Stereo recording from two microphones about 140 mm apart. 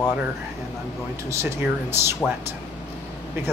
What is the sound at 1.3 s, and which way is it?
Speech, 20° right (ahead or behind).